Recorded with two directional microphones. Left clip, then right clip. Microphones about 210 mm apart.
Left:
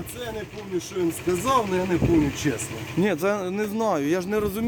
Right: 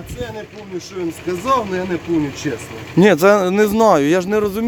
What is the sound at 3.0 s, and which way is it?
Speech, 50° right (ahead or behind).